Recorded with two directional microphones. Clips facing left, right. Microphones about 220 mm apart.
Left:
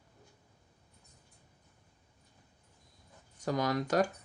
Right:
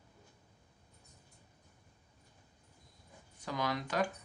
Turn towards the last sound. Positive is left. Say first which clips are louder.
# left 5 dB
turn(degrees=45)  # may be behind; listen again after turning